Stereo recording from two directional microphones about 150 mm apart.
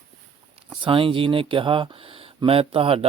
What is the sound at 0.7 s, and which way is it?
Speech, 35° right (ahead or behind).